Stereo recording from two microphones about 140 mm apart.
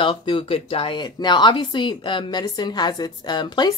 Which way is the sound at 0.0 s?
35° left (ahead or behind).